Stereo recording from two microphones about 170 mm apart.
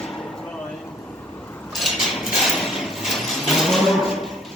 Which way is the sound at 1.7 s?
Centre (ahead or behind).